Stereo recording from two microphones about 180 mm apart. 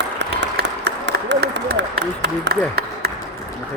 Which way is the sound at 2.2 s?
65° right (ahead or behind).